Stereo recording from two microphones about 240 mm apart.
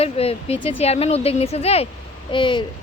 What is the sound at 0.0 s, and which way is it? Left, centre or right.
Speech, left.